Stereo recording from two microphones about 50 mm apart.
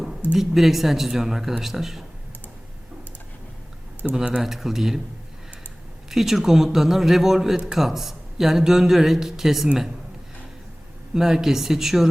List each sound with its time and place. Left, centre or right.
0.3 s a man's voice: centre
4.0 s a man's voice: centre
6.1 s a man's voice: centre
11.1 s a man's voice: centre